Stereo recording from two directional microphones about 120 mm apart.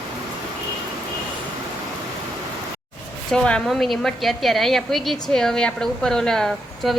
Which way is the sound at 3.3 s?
5° left (ahead or behind).